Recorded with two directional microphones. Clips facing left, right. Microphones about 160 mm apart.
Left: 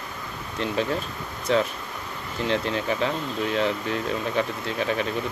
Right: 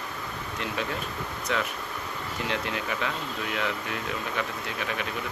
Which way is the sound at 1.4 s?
30° left (ahead or behind).